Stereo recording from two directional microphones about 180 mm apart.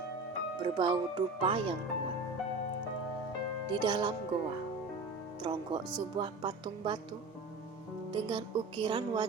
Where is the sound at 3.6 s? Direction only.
25° right (ahead or behind).